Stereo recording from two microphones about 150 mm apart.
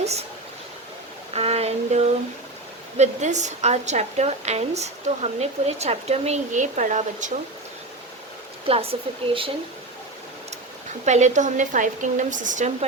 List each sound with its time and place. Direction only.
0.0 s speech: 45° right (ahead or behind)
1.3 s a sound: 45° right (ahead or behind)
3.0 s a woman's voice: 50° right (ahead or behind)
8.6 s speech: 40° right (ahead or behind)
11.0 s speech: 50° right (ahead or behind)